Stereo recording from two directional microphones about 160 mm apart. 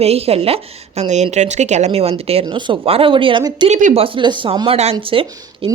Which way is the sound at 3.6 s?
45° right (ahead or behind).